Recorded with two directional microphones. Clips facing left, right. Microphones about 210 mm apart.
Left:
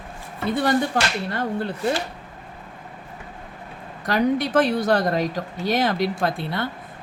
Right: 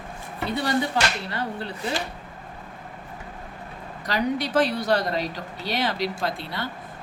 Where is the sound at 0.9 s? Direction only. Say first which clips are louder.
Left 2 dB; 50° left (ahead or behind).